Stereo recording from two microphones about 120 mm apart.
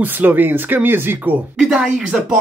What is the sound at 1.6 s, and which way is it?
Speech, centre (ahead or behind).